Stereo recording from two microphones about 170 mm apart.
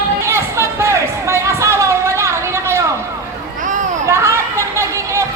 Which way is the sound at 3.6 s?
50° right (ahead or behind).